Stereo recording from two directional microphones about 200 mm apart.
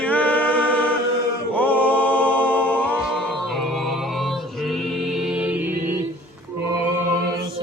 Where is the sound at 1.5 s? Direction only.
10° left (ahead or behind); by 5.7 s 5° right (ahead or behind).